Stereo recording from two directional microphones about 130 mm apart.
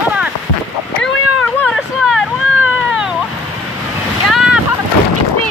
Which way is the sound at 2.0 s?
5° right (ahead or behind).